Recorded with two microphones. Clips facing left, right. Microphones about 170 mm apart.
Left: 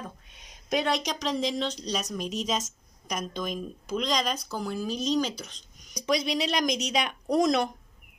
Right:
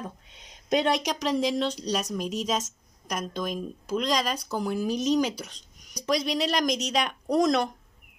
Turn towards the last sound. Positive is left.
turn(degrees=0)  # may be behind; listen again after turning